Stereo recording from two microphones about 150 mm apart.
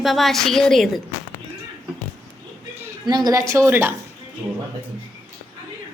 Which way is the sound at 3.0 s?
25° right (ahead or behind).